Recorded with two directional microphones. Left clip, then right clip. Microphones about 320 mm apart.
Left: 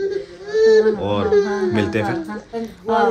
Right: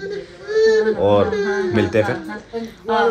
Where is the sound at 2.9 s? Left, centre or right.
Left.